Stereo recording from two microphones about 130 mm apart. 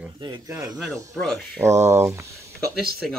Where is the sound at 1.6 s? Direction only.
20° right (ahead or behind).